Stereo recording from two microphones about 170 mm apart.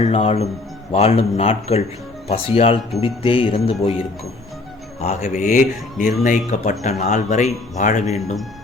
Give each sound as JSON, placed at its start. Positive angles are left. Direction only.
{"t": 0.0, "sound": "speech", "side_deg": 35}